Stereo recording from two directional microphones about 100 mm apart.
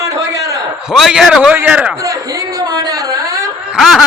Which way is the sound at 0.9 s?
5° right (ahead or behind).